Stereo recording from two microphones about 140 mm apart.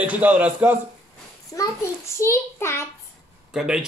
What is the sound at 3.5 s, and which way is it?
Speech, 5° right (ahead or behind).